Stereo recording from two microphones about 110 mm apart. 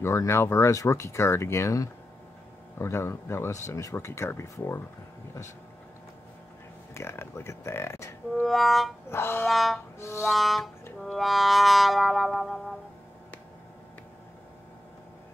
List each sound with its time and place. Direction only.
0.0 s speech: 25° left (ahead or behind)
6.9 s speech: 25° left (ahead or behind)
8.4 s music: centre (ahead or behind)
9.1 s speech: 20° left (ahead or behind)
9.5 s music: centre (ahead or behind)
9.9 s music: 25° left (ahead or behind)
10.2 s music: centre (ahead or behind)